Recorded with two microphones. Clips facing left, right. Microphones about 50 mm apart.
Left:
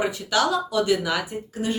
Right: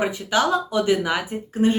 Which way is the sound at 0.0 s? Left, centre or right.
Right.